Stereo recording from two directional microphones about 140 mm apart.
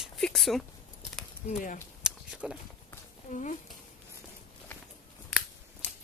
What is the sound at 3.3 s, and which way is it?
Speech, 60° left (ahead or behind).